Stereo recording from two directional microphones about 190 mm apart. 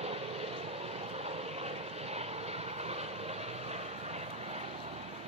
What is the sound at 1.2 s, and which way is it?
Vehicle, 35° right (ahead or behind).